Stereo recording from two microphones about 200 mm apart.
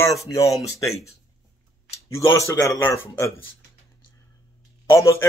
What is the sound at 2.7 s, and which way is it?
Speech, 10° left (ahead or behind).